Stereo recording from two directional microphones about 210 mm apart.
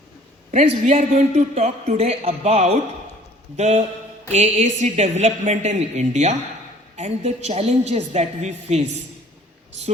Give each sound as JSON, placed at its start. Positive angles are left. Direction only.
{"t": 0.5, "sound": "a man's voice", "side_deg": -35}